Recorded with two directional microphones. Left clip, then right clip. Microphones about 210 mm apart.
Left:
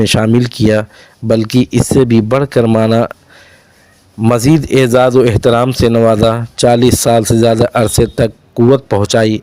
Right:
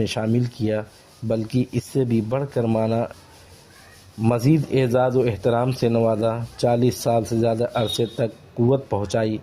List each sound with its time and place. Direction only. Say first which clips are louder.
0.0 s speech: left 12 dB; 40° left (ahead or behind)
4.2 s speech: left 10 dB; 35° left (ahead or behind)